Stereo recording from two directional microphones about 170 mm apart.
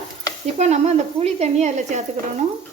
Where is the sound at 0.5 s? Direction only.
40° right (ahead or behind).